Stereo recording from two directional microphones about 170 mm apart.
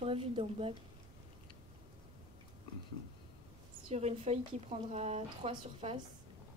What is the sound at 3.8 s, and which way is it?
A woman's voice, 35° right (ahead or behind).